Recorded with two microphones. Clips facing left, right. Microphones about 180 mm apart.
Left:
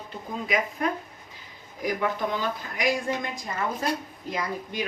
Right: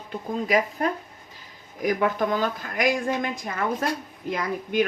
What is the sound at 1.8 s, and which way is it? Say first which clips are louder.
Speech: right 4 dB; 50° right (ahead or behind).